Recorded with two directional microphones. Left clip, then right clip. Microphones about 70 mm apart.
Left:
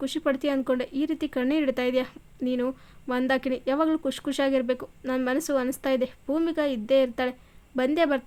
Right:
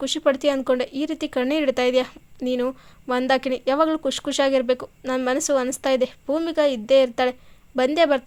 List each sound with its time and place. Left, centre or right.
0.0 s speech: right